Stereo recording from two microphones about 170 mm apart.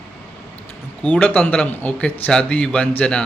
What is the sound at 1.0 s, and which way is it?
Speech, 10° left (ahead or behind).